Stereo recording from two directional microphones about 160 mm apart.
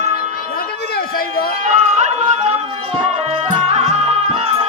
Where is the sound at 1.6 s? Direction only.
45° right (ahead or behind).